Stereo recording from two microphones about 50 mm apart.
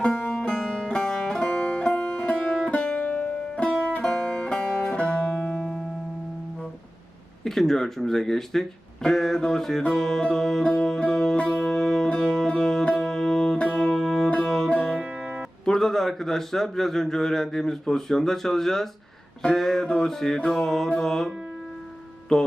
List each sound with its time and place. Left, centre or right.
0.3 s music: left
7.4 s speech: centre
10.6 s music: left
13.1 s music: centre
13.6 s music: left
13.8 s music: centre
15.6 s a man's voice: centre
19.5 s music: centre
21.0 s speech: centre